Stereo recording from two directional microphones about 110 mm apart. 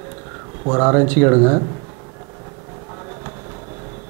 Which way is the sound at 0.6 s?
20° right (ahead or behind).